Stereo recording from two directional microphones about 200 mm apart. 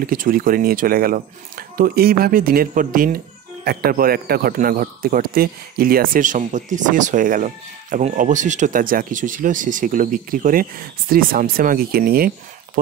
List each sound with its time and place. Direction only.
0.0 s speech: 45° right (ahead or behind)